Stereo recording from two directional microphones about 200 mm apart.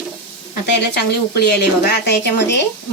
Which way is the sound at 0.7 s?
55° left (ahead or behind).